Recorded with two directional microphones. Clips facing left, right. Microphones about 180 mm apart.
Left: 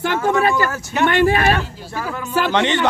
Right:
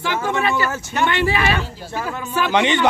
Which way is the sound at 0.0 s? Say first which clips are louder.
Left 4 dB; 45° left (ahead or behind).